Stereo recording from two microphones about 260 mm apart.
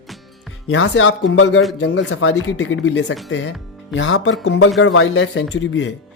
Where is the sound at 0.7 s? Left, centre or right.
Left.